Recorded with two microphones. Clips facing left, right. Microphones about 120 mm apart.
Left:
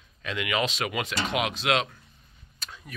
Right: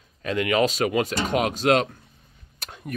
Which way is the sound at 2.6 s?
60° right (ahead or behind).